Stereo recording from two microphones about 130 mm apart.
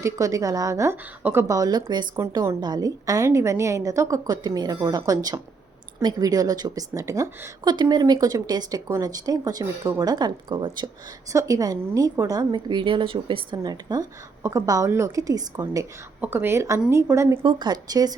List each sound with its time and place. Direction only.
0.0 s a woman's voice: 25° right (ahead or behind)
11.3 s a woman's voice: 25° right (ahead or behind)
16.2 s a woman's voice: 15° right (ahead or behind)
17.4 s speech: 35° right (ahead or behind)